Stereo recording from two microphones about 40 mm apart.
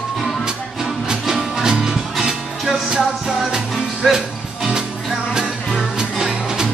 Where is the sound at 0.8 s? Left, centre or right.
Centre.